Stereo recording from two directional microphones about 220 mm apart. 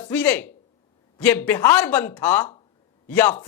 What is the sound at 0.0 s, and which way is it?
A man's voice, 5° left (ahead or behind).